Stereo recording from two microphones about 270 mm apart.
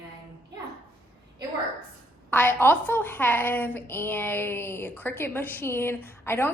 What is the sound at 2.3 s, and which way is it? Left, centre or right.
A woman's voice, centre.